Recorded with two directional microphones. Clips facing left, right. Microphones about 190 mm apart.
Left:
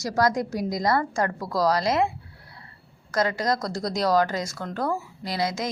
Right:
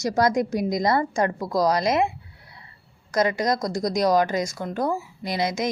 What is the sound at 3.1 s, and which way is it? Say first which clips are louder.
A woman's voice: right 2 dB; 20° right (ahead or behind).